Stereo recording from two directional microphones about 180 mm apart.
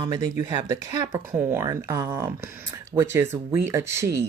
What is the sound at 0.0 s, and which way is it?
Speech, 20° right (ahead or behind).